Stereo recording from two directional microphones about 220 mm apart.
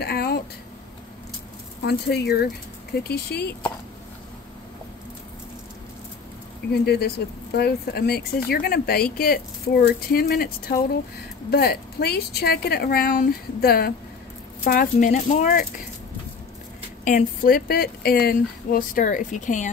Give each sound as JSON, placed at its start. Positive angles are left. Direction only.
{"t": 0.0, "sound": "a sound", "side_deg": 45}
{"t": 1.9, "sound": "speech", "side_deg": 45}
{"t": 6.7, "sound": "speech", "side_deg": 45}
{"t": 17.0, "sound": "speech", "side_deg": 40}